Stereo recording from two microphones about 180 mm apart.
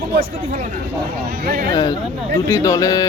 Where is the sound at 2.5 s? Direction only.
20° left (ahead or behind).